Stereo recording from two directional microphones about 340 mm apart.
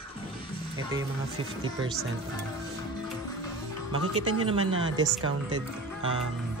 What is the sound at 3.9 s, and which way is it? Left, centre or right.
Speech, right.